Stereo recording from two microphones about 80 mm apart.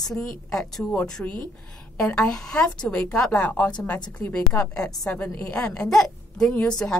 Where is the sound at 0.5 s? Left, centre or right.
Centre.